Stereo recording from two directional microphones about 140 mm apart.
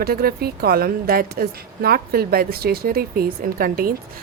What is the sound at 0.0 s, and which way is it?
Speech, 90° right.